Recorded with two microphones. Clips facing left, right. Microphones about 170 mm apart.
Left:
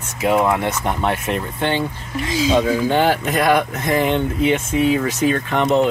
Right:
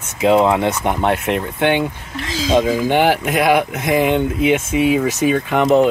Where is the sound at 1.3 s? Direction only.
65° right (ahead or behind).